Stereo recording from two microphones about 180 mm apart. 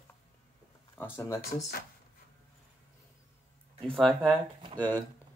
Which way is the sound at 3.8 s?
5° left (ahead or behind).